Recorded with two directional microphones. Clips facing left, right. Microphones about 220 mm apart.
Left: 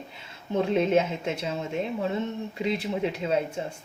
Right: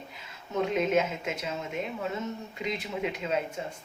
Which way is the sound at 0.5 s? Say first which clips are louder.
Left 3 dB; 30° left (ahead or behind).